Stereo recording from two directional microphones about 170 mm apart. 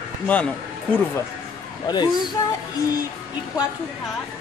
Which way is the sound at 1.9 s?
25° left (ahead or behind).